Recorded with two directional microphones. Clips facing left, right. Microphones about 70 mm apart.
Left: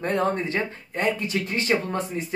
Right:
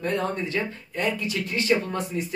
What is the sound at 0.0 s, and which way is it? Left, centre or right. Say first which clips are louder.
Speech: left 3 dB; left.